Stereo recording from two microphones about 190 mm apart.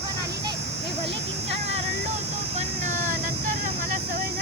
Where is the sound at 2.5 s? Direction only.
40° right (ahead or behind).